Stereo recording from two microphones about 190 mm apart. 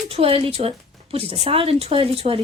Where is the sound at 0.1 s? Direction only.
30° right (ahead or behind).